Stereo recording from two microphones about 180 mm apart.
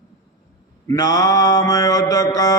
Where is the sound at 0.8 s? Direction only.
20° left (ahead or behind).